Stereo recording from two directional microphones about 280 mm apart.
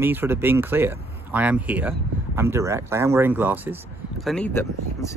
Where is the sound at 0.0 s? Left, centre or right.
Centre.